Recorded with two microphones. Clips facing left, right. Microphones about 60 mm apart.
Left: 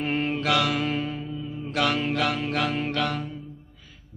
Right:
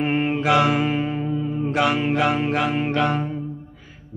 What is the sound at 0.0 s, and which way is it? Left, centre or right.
Mantra, right.